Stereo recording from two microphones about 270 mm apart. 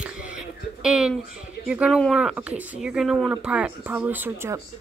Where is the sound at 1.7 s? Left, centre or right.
Centre.